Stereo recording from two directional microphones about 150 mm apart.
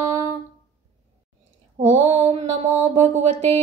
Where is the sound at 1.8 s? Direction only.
45° right (ahead or behind).